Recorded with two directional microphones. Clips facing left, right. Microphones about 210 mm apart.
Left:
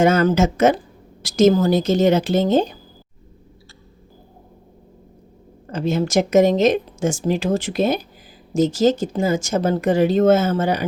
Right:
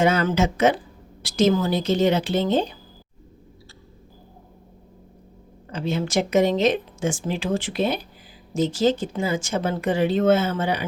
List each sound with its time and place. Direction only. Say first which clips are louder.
0.0 s speech: left 4 dB; 45° left (ahead or behind)
5.7 s speech: left 5 dB; 45° left (ahead or behind)